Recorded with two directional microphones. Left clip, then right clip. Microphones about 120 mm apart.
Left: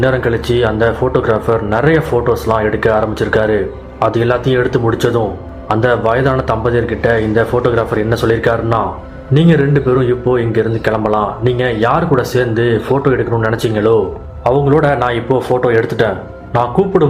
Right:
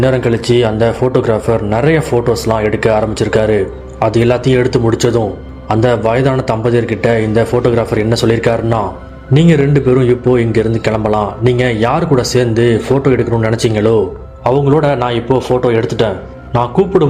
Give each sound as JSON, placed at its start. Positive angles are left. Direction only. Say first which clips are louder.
{"t": 0.0, "sound": "a man's voice", "louder": "right 1 dB", "side_deg": -40}
{"t": 14.4, "sound": "speech", "louder": "even", "side_deg": -30}